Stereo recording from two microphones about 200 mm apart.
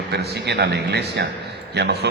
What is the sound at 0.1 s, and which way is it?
A man's voice, 55° right (ahead or behind).